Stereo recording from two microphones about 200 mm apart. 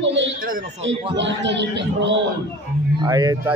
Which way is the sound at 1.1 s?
65° right (ahead or behind).